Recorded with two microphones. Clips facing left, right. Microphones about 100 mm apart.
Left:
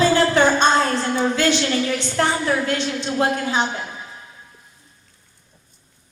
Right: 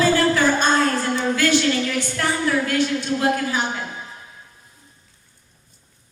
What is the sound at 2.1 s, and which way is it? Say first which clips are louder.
A woman's voice: left 2 dB; 30° left (ahead or behind).